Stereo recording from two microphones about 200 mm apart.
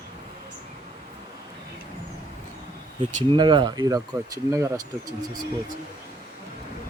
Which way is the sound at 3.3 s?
25° right (ahead or behind).